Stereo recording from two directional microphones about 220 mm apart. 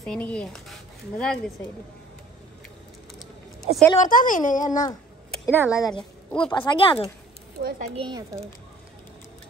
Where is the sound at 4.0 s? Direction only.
35° left (ahead or behind).